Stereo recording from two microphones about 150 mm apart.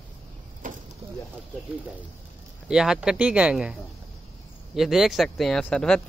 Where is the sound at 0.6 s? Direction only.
65° right (ahead or behind).